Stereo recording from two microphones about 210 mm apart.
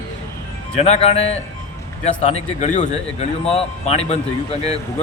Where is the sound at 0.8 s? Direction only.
30° left (ahead or behind).